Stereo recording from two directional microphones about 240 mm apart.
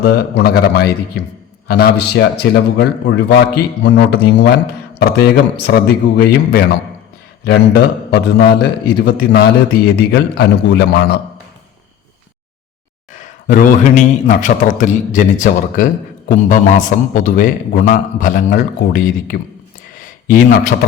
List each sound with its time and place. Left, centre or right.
0.0 s a man's voice: left
13.5 s a man's voice: left